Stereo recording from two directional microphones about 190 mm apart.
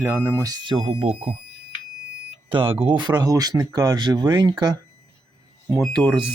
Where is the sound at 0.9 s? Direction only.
30° right (ahead or behind).